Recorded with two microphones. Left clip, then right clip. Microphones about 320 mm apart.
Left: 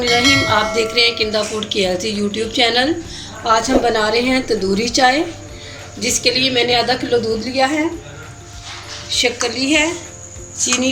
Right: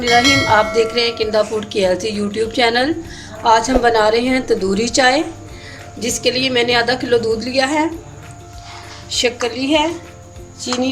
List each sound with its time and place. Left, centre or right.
0.0 s music: centre
0.5 s speech: right
9.0 s speech: right